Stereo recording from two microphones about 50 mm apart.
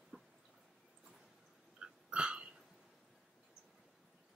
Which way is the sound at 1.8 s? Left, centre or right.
Centre.